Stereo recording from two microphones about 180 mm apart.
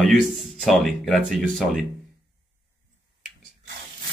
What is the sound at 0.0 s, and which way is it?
Speech, centre (ahead or behind).